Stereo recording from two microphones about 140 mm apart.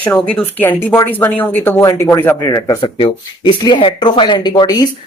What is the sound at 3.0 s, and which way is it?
Speech, 40° left (ahead or behind).